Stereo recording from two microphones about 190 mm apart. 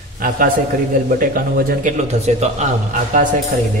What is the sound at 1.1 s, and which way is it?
A man's voice, 50° right (ahead or behind).